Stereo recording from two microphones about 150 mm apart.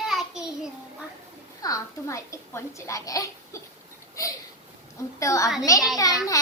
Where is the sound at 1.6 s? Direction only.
25° left (ahead or behind).